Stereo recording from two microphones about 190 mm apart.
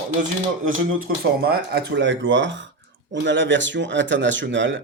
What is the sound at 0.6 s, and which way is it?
Speech, 50° right (ahead or behind).